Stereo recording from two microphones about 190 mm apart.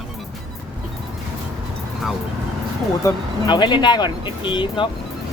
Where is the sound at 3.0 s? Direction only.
25° left (ahead or behind).